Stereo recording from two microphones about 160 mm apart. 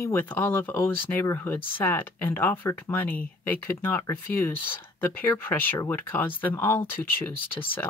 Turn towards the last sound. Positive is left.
turn(degrees=15)  # may be behind; listen again after turning